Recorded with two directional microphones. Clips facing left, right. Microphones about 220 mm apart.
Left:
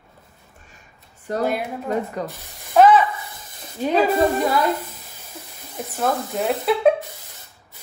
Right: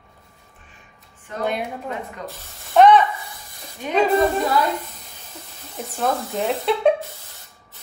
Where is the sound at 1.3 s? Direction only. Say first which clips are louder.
Left 6 dB; 40° left (ahead or behind).